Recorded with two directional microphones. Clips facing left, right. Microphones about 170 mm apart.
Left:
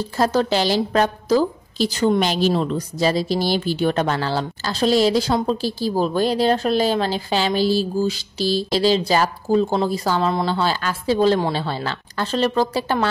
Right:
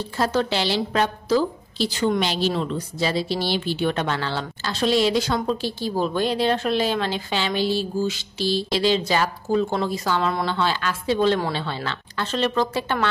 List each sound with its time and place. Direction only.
0.0 s a woman's voice: 40° left (ahead or behind)